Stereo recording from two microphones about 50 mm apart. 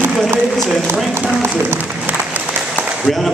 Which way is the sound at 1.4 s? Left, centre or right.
Right.